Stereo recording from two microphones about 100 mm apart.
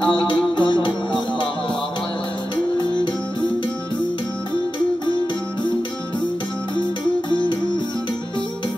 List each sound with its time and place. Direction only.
0.6 s music: 55° left (ahead or behind)